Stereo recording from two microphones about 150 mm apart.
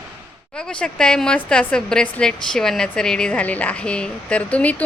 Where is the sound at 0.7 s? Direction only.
5° left (ahead or behind).